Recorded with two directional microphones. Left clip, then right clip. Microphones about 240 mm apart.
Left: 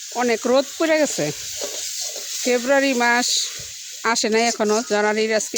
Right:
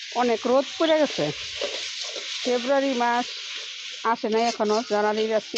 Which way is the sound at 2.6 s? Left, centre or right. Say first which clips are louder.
Left 5 dB; left.